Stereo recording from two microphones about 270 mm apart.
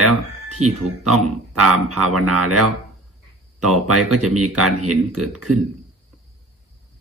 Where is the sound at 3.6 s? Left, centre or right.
Right.